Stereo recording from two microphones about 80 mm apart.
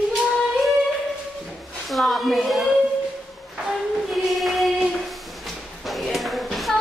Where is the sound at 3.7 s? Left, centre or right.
Centre.